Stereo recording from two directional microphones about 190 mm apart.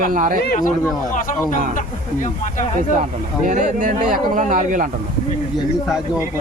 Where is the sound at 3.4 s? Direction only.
45° right (ahead or behind).